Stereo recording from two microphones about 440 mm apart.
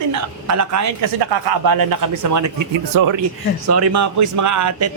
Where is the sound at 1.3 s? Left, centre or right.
Right.